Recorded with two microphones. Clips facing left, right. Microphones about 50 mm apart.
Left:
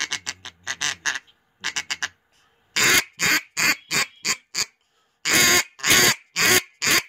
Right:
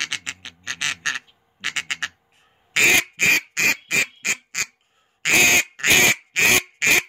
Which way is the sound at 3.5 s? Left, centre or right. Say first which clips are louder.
Right 2 dB; right.